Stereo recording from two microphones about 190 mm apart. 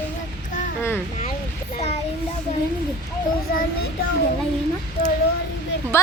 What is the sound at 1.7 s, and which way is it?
Speech, 35° left (ahead or behind).